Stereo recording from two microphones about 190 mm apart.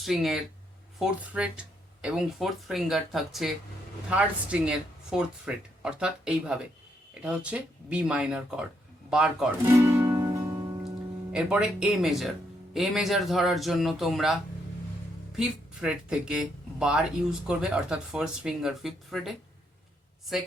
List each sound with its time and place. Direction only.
0.0 s speech: centre (ahead or behind)
9.7 s music: 15° right (ahead or behind)
11.3 s speech: 5° right (ahead or behind)
15.4 s speech: 5° right (ahead or behind)